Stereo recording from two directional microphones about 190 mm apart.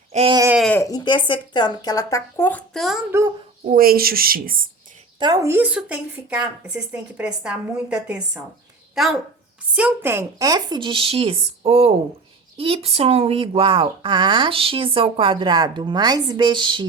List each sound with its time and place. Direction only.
0.1 s speech: 35° right (ahead or behind)
0.5 s speech: centre (ahead or behind)
0.8 s speech: 20° left (ahead or behind); by 3.0 s centre (ahead or behind)
3.1 s speech: 15° right (ahead or behind)
3.7 s speech: 50° right (ahead or behind)
5.2 s a woman's voice: 20° right (ahead or behind)